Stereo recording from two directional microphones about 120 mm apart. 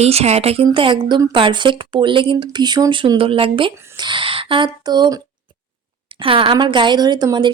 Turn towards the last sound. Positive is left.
turn(degrees=-40)  # may be behind; listen again after turning